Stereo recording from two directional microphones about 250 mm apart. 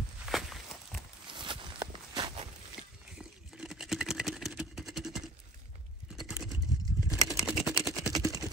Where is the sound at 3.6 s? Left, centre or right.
Centre.